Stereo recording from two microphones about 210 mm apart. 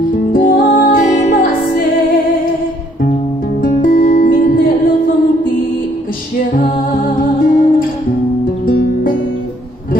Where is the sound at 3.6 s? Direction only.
40° left (ahead or behind).